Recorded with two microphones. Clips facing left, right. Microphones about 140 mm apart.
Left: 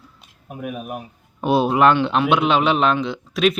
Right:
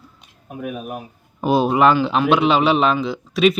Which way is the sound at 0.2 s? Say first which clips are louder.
Right 1 dB; 5° left (ahead or behind).